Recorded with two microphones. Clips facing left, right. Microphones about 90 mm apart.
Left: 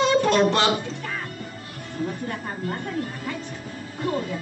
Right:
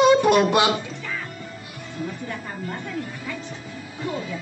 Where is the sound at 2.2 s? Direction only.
45° left (ahead or behind).